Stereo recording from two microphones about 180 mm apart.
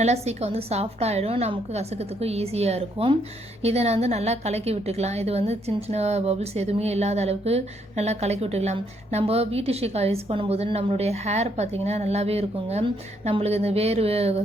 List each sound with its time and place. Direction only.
0.0 s a woman's voice: 35° right (ahead or behind)